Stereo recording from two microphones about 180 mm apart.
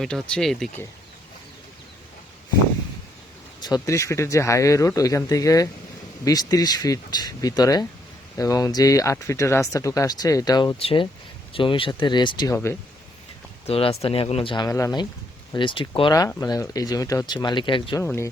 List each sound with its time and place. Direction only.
0.0 s speech: 5° left (ahead or behind)
3.6 s speech: 20° left (ahead or behind)
13.7 s speech: 35° left (ahead or behind)
18.0 s speech: 15° left (ahead or behind)